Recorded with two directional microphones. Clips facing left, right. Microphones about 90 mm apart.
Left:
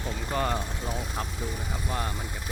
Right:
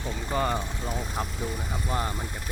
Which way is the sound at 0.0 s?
Centre (ahead or behind).